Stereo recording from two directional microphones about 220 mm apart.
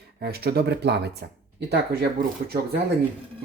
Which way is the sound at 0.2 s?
45° right (ahead or behind).